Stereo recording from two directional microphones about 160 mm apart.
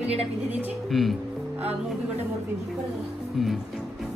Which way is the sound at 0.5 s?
10° right (ahead or behind).